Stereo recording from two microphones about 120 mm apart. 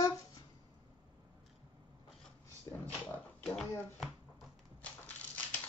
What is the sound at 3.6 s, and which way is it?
Speech, 5° left (ahead or behind).